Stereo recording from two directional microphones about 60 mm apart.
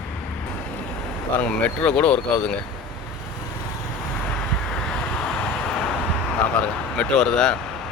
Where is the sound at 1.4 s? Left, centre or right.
Left.